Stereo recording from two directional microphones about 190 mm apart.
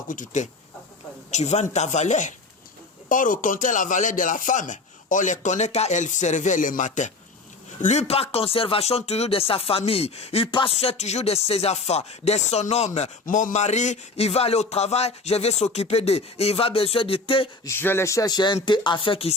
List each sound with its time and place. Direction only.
0.1 s speech: 45° left (ahead or behind); by 17.5 s 30° left (ahead or behind)
17.7 s speech: 10° left (ahead or behind)